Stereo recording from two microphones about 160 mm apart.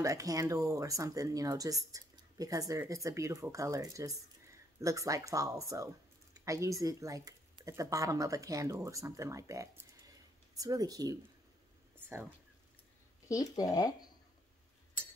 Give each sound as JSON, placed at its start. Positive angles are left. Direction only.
{"t": 0.0, "sound": "speech", "side_deg": -20}
{"t": 13.3, "sound": "speech", "side_deg": 20}